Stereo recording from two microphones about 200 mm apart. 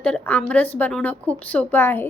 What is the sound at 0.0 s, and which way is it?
Speech, 5° left (ahead or behind).